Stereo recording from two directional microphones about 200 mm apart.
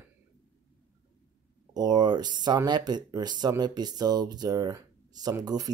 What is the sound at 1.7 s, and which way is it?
Speech, 20° right (ahead or behind).